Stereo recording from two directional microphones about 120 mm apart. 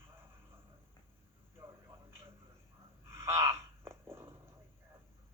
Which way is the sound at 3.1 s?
20° right (ahead or behind).